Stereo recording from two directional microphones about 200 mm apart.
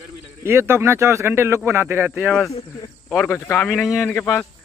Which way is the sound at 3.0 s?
5° left (ahead or behind).